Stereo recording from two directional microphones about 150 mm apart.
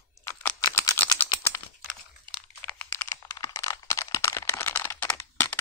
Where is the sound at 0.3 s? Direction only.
15° left (ahead or behind).